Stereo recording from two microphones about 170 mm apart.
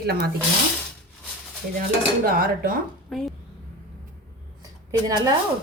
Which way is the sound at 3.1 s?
Centre (ahead or behind).